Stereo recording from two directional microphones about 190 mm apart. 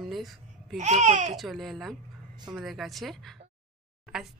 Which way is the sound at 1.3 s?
Centre (ahead or behind).